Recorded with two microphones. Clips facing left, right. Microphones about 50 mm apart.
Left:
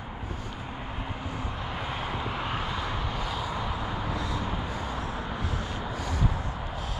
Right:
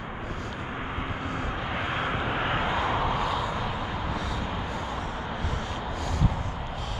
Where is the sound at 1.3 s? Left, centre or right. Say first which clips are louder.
Right 4 dB; right.